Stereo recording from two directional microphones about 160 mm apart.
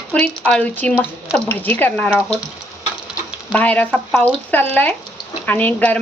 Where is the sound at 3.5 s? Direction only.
10° left (ahead or behind).